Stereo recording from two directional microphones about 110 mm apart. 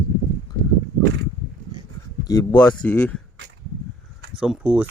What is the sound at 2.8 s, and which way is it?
Speech, 10° left (ahead or behind).